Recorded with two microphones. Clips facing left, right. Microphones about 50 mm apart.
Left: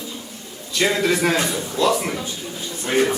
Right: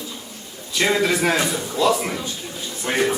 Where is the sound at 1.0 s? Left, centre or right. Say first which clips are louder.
Even; centre.